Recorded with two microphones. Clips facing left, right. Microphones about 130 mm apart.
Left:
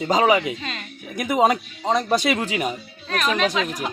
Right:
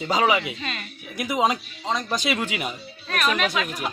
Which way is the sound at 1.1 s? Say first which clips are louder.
Left 4 dB; 45° left (ahead or behind).